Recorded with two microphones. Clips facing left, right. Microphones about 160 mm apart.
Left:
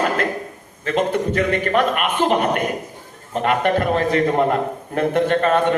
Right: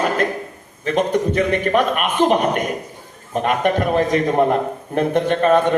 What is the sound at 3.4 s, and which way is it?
A man's voice, 15° right (ahead or behind).